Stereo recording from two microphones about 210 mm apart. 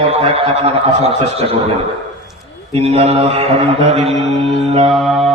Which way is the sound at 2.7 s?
30° right (ahead or behind).